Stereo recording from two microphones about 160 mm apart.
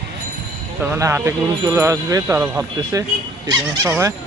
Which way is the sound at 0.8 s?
15° right (ahead or behind).